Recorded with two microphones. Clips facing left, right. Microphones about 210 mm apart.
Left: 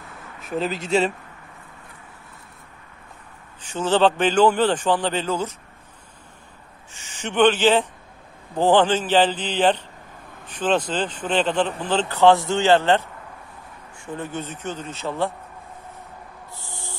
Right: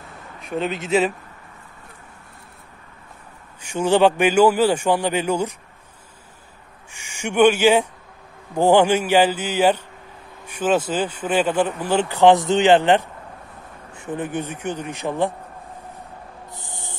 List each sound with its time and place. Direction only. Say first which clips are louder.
0.4 s a man's voice: right 1 dB; centre (ahead or behind)
3.6 s a man's voice: right 3 dB; 15° right (ahead or behind)
6.9 s a man's voice: right 3 dB; 10° right (ahead or behind)
16.5 s a sound: even; 20° right (ahead or behind)